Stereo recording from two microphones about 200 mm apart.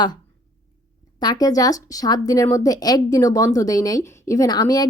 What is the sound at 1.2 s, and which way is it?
Speech, 20° left (ahead or behind).